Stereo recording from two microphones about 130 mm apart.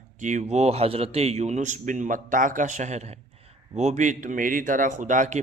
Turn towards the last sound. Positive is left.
turn(degrees=-75)  # may be behind; listen again after turning